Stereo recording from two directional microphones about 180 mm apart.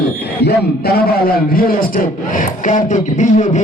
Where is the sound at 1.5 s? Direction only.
55° left (ahead or behind).